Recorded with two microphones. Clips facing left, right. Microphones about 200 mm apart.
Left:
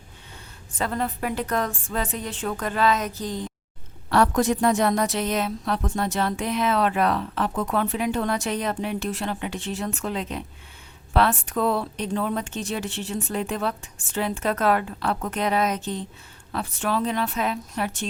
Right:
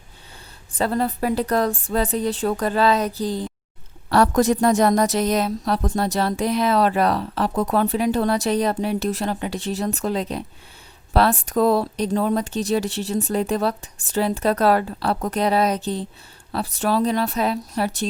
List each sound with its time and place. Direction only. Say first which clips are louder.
0.7 s a woman's voice: right 5 dB; 35° right (ahead or behind)